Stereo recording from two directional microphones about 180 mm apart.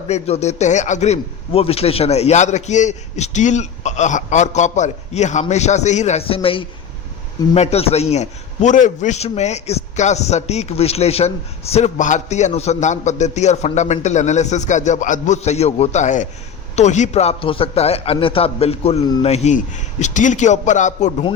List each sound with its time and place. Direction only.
0.1 s a man's voice: 35° left (ahead or behind)